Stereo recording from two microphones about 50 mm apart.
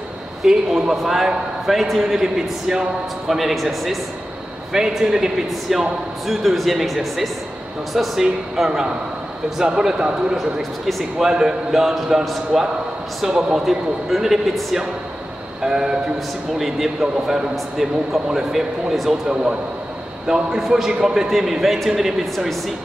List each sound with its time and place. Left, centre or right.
0.5 s a man's voice: centre
4.7 s a man's voice: centre
6.2 s a man's voice: centre
10.9 s a man's voice: centre
11.2 s a man's voice: centre